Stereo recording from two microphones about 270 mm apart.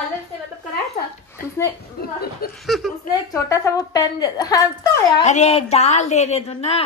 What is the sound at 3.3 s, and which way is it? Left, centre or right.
A woman's voice, centre.